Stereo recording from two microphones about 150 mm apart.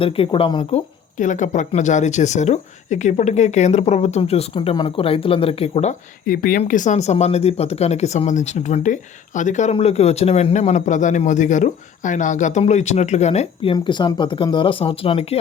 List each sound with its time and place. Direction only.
0.0 s speech: 35° left (ahead or behind)
1.2 s a man's voice: 55° left (ahead or behind)
6.2 s speech: 70° left (ahead or behind)
6.6 s a man's voice: 55° left (ahead or behind)
9.7 s a man's voice: 45° left (ahead or behind)